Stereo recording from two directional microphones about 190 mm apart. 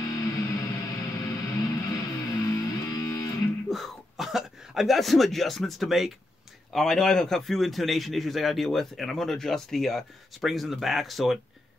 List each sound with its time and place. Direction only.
0.0 s music: 15° left (ahead or behind)
3.6 s a man's voice: centre (ahead or behind)